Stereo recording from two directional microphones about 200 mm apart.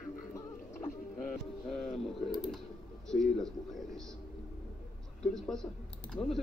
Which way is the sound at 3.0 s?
Centre (ahead or behind).